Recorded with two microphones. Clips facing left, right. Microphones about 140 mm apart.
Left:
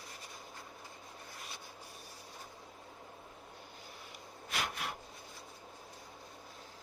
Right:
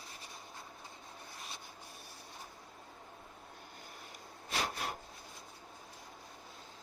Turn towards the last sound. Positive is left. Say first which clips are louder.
# right 2 dB
turn(degrees=-35)  # may be behind; listen again after turning